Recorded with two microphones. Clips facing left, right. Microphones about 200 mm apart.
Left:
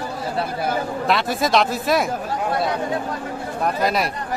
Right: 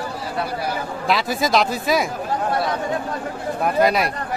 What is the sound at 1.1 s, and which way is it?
A man's voice, centre (ahead or behind).